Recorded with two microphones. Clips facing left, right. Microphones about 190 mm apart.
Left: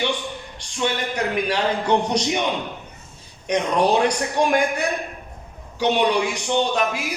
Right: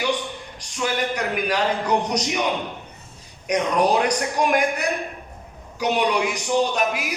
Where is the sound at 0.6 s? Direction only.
30° left (ahead or behind).